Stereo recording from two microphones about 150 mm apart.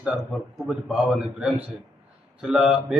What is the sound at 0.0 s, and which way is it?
A man's voice, 5° right (ahead or behind).